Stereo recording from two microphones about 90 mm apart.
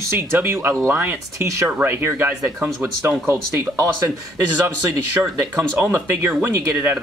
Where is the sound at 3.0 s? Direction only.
35° right (ahead or behind).